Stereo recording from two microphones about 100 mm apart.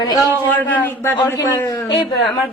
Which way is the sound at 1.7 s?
45° left (ahead or behind).